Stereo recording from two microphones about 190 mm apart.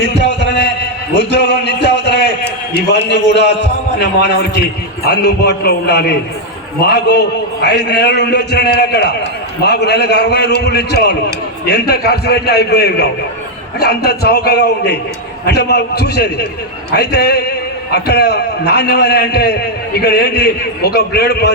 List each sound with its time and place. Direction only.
0.4 s heart sounds: 65° left (ahead or behind)
1.4 s music: 60° left (ahead or behind)
3.2 s a sound: 65° right (ahead or behind)
4.0 s a man's voice: 55° left (ahead or behind)